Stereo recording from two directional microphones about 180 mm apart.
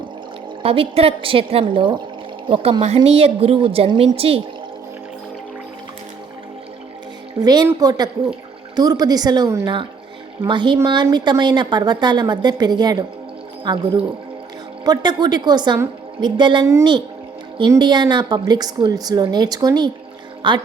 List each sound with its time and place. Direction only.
0.6 s a woman's voice: 30° right (ahead or behind)
7.4 s a woman's voice: 20° right (ahead or behind)
14.8 s a woman's voice: 25° right (ahead or behind)